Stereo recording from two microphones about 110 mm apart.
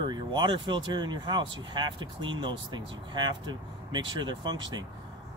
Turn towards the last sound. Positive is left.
turn(degrees=-45)  # may be behind; listen again after turning